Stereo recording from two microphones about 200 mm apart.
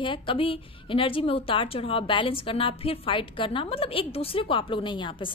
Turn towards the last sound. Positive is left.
turn(degrees=25)  # may be behind; listen again after turning